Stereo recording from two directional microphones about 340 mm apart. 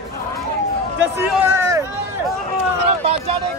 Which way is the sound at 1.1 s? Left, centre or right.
Centre.